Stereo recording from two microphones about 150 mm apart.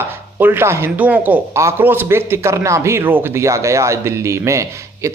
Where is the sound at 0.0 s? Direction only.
15° right (ahead or behind).